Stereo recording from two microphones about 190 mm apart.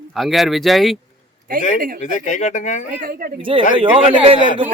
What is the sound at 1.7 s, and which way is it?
Speech, 50° right (ahead or behind).